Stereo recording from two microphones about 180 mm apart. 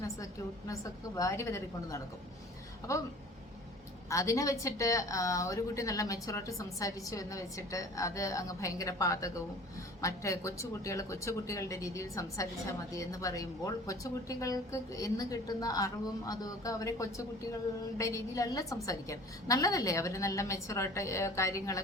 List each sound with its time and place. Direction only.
0.7 s speech: 15° left (ahead or behind)
4.1 s a woman's voice: 15° left (ahead or behind)